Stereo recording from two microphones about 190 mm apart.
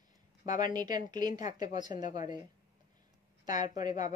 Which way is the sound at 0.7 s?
20° right (ahead or behind).